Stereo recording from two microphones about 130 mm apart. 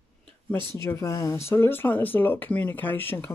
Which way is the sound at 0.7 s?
20° left (ahead or behind).